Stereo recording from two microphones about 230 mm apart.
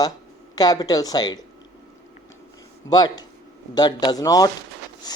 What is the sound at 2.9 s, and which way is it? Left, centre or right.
Speech, centre.